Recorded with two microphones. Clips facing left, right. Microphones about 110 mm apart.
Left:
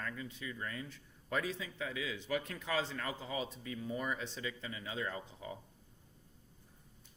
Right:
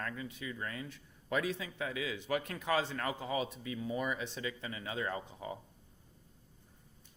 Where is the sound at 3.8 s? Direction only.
90° right.